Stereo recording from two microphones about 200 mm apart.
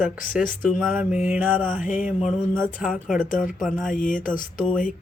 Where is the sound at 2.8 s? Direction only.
40° left (ahead or behind).